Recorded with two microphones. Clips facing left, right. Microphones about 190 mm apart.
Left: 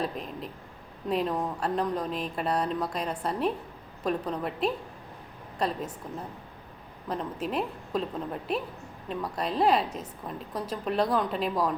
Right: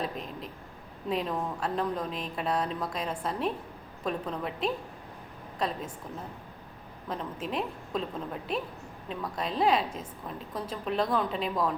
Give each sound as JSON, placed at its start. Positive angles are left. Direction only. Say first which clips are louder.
{"t": 0.0, "sound": "a woman's voice", "louder": "left 2 dB", "side_deg": 0}
{"t": 7.4, "sound": "a woman's voice", "louder": "left 2 dB", "side_deg": 0}